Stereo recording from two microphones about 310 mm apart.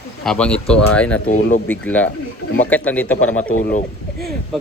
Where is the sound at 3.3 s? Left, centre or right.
Left.